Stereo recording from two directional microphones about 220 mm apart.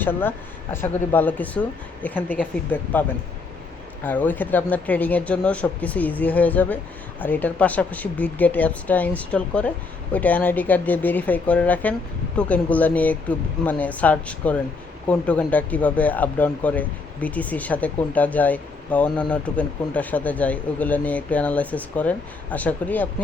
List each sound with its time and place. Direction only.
0.0 s speech: 10° left (ahead or behind)
4.0 s speech: 10° left (ahead or behind)